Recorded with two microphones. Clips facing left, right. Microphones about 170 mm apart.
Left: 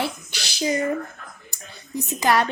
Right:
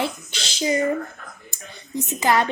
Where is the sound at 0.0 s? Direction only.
20° right (ahead or behind).